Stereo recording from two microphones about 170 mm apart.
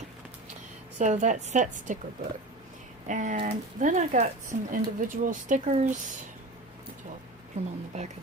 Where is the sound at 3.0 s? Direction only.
45° right (ahead or behind).